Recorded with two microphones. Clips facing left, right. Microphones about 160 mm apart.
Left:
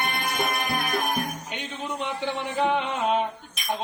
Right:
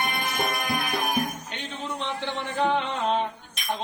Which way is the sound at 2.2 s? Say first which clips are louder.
Left 1 dB; 10° left (ahead or behind).